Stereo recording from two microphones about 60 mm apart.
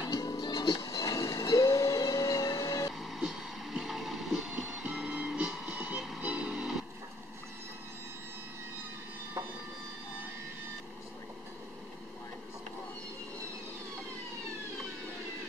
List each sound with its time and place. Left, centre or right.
0.1 s music: left
0.8 s train: left
3.0 s a sound: centre
5.2 s music: centre
5.7 s music: right
5.9 s music: centre
6.2 s music: centre